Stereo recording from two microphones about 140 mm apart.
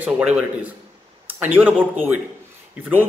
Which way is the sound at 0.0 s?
10° right (ahead or behind).